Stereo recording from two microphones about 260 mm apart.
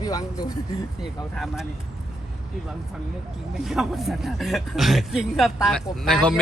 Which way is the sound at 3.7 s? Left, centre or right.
Centre.